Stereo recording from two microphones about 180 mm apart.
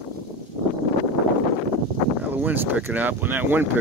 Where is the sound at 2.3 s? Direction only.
10° right (ahead or behind).